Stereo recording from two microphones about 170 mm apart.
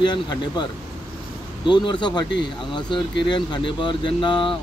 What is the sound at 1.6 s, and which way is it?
Speech, 25° left (ahead or behind).